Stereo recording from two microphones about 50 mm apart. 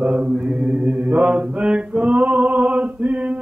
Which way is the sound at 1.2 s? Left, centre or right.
Centre.